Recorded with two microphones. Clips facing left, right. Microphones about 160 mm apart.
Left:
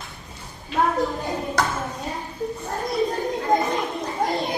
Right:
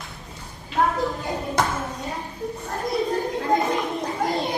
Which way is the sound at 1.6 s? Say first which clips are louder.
Right 1 dB; 25° right (ahead or behind).